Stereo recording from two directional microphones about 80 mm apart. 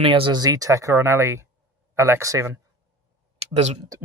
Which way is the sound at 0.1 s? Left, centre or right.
Right.